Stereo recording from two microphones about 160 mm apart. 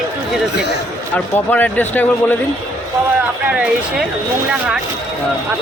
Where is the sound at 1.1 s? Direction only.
10° left (ahead or behind).